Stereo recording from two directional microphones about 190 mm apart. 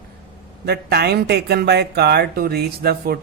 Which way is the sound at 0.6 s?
55° right (ahead or behind).